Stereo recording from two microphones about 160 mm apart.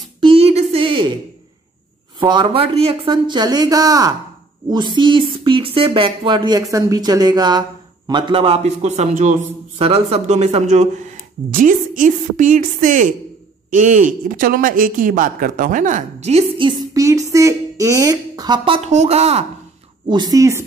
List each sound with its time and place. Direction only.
0.2 s a sound: 35° right (ahead or behind)
2.1 s speech: 30° right (ahead or behind)
4.6 s music: 30° right (ahead or behind)
5.9 s a man's voice: 30° right (ahead or behind); by 9.3 s 45° right (ahead or behind)
9.8 s music: 35° right (ahead or behind)
11.5 s speech: 55° right (ahead or behind); by 16.7 s 35° right (ahead or behind)
16.9 s speech: 20° right (ahead or behind)
18.6 s music: 40° right (ahead or behind)
20.1 s speech: 25° right (ahead or behind)